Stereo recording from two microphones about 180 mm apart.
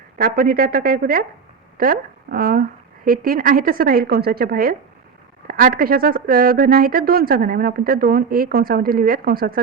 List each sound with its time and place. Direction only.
0.2 s speech: 55° right (ahead or behind)